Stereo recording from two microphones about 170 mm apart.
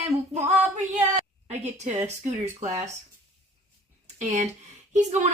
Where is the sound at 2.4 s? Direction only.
40° right (ahead or behind).